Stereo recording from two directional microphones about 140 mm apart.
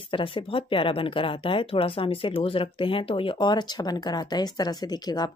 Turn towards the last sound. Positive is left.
turn(degrees=30)  # may be behind; listen again after turning